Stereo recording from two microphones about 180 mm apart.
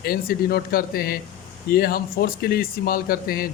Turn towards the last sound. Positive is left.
turn(degrees=55)  # may be behind; listen again after turning